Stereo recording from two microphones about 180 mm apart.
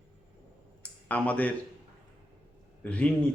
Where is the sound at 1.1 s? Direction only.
10° left (ahead or behind).